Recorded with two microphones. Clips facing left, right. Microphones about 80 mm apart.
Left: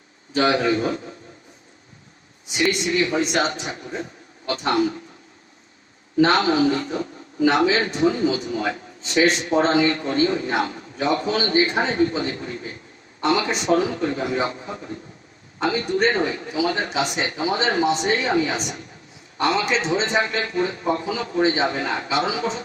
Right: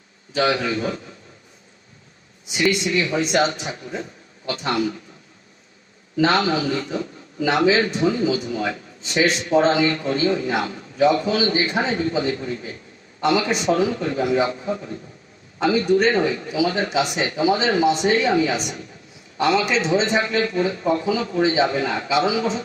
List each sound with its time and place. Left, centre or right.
0.3 s a man's voice: left
2.5 s a man's voice: left
6.1 s a man's voice: left